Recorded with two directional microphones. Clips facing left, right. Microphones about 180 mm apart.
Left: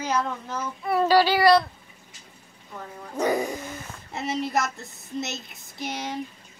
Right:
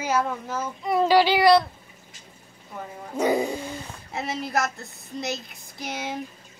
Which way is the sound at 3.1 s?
15° right (ahead or behind).